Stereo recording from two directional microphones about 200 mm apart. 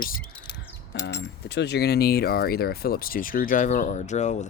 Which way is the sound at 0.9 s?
55° left (ahead or behind).